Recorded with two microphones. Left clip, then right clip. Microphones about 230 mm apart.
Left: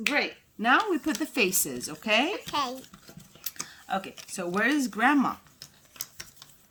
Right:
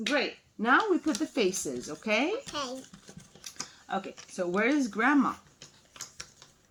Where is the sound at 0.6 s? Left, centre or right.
Left.